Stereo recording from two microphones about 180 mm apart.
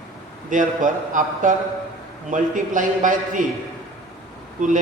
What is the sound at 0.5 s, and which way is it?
Speech, 45° right (ahead or behind).